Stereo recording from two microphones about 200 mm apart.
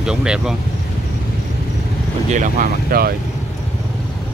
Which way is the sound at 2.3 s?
40° right (ahead or behind).